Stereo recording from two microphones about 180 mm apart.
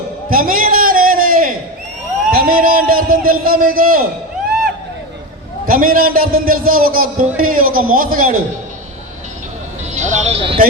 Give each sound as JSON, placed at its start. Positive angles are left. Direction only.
{"t": 0.3, "sound": "a sound", "side_deg": -50}
{"t": 5.6, "sound": "a man's voice", "side_deg": -50}
{"t": 9.9, "sound": "music", "side_deg": -40}